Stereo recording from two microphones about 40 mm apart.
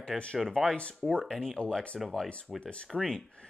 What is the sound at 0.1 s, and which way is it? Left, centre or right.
Speech, centre.